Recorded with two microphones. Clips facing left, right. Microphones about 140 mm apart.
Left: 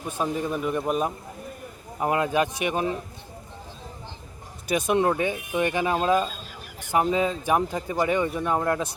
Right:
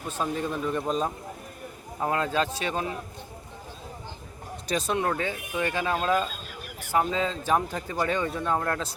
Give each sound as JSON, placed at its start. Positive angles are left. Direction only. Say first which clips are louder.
{"t": 0.0, "sound": "speech", "louder": "left 2 dB", "side_deg": 15}
{"t": 4.7, "sound": "speech", "louder": "left 5 dB", "side_deg": 15}